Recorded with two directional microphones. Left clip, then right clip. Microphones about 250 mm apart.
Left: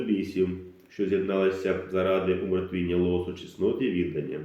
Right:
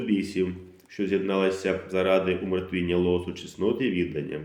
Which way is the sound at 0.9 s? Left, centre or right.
Right.